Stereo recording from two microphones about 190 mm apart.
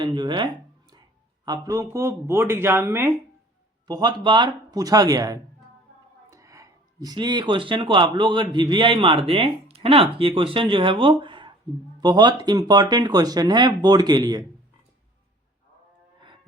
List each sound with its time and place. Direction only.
0.0 s speech: 25° right (ahead or behind)